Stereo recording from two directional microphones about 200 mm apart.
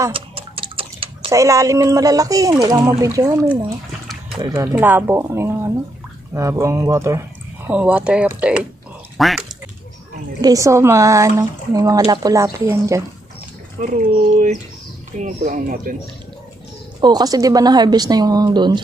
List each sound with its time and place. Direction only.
0.0 s a sound: 25° right (ahead or behind)
1.3 s speech: 15° right (ahead or behind); by 9.5 s centre (ahead or behind)
10.4 s speech: 15° right (ahead or behind)
13.8 s speech: 35° right (ahead or behind)
17.0 s a woman's voice: 20° right (ahead or behind)